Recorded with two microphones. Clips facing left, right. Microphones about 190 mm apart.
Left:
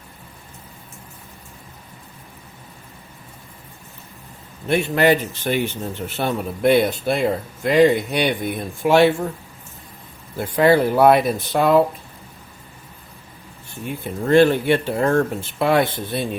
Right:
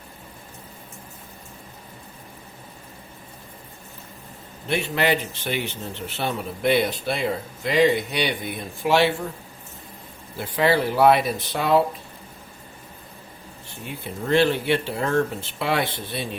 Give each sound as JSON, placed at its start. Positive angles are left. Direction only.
{"t": 4.7, "sound": "speech", "side_deg": 50}
{"t": 10.3, "sound": "speech", "side_deg": 50}
{"t": 14.3, "sound": "speech", "side_deg": 50}